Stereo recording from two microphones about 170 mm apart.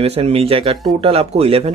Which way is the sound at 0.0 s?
35° right (ahead or behind).